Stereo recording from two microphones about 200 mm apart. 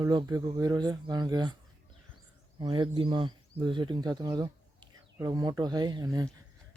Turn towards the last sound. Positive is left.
turn(degrees=-20)  # may be behind; listen again after turning